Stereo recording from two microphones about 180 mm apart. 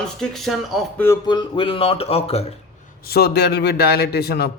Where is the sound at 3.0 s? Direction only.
60° left (ahead or behind).